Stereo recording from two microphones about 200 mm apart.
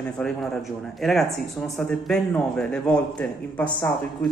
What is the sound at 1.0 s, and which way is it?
A man's voice, centre (ahead or behind).